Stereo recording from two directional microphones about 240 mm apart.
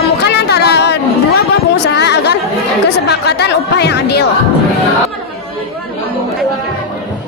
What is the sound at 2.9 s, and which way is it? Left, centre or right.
Speech, left.